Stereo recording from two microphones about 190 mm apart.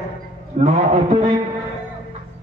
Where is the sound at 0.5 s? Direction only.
35° right (ahead or behind).